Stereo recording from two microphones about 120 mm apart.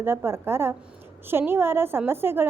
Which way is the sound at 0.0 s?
20° right (ahead or behind).